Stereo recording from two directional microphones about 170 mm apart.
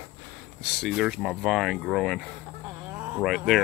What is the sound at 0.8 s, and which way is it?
Speech, 5° right (ahead or behind).